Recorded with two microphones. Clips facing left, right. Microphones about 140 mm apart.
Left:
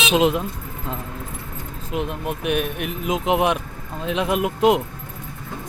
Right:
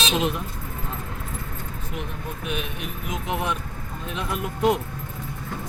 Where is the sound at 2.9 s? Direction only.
90° left.